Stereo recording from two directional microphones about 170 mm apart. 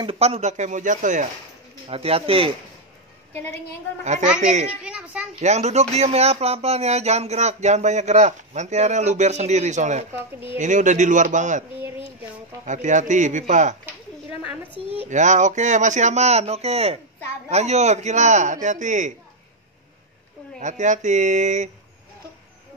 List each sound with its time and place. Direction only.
0.0 s speech: 35° right (ahead or behind)
1.9 s speech: 35° right (ahead or behind)
4.0 s speech: 45° right (ahead or behind)
4.6 s a woman's voice: 5° right (ahead or behind)
5.4 s speech: 40° right (ahead or behind)
12.6 s speech: 45° right (ahead or behind)
14.4 s a child's voice: 10° right (ahead or behind)
14.8 s speech: 30° left (ahead or behind)
15.0 s speech: 45° right (ahead or behind)
20.5 s speech: 45° right (ahead or behind)